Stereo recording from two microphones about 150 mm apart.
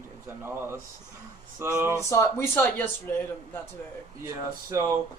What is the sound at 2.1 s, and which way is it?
Speech, 20° left (ahead or behind).